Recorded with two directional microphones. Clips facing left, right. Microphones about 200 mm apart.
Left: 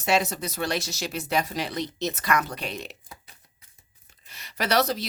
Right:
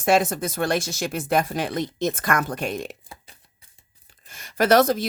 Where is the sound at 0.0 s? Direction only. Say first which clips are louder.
Right 5 dB; 50° right (ahead or behind).